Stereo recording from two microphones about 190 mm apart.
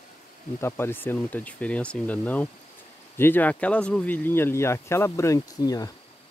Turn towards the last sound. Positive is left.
turn(degrees=20)  # may be behind; listen again after turning